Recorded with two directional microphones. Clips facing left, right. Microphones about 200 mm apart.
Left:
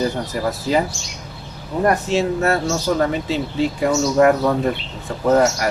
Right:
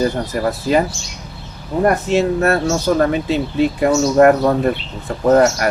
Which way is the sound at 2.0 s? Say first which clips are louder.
Right 3 dB; 60° right (ahead or behind).